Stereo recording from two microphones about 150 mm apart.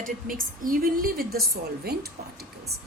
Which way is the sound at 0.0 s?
65° right (ahead or behind).